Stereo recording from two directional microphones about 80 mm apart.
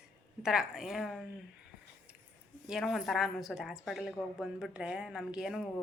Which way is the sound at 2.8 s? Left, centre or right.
Centre.